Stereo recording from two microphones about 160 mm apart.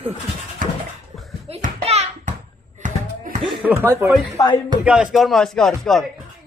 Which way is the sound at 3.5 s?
10° right (ahead or behind).